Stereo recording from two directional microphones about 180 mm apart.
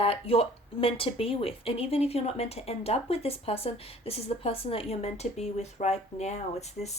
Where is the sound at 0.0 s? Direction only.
35° left (ahead or behind).